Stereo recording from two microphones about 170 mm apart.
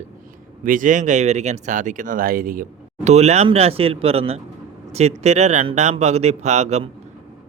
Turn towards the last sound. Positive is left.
turn(degrees=-40)  # may be behind; listen again after turning